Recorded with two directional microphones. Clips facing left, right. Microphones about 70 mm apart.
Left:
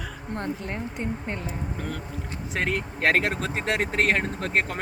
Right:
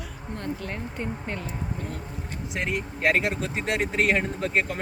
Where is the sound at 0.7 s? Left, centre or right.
Centre.